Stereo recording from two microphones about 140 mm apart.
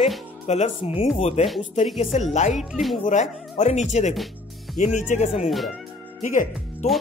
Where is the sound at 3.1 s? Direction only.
55° left (ahead or behind).